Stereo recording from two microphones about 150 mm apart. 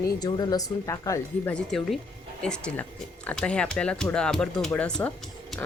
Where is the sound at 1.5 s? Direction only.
5° left (ahead or behind).